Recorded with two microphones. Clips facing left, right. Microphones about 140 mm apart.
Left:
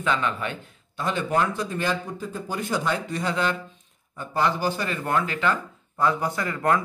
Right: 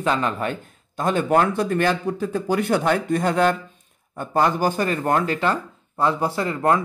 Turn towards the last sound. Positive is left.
turn(degrees=-25)  # may be behind; listen again after turning